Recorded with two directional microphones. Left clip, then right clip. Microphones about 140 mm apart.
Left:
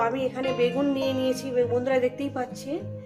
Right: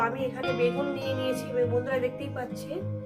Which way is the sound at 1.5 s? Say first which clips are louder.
Left 4 dB; 45° left (ahead or behind).